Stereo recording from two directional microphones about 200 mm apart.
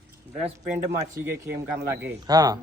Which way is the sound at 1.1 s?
15° right (ahead or behind).